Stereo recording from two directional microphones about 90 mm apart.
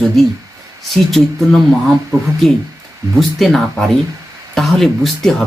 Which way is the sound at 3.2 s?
Centre (ahead or behind).